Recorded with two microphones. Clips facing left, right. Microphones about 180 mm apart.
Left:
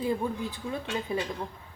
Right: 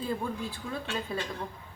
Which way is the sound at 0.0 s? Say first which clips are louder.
Left 3 dB; 20° left (ahead or behind).